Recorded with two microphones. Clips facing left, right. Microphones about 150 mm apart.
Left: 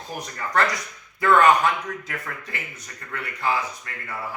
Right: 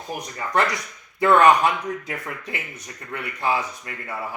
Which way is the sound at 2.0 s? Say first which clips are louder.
Right 3 dB; 20° right (ahead or behind).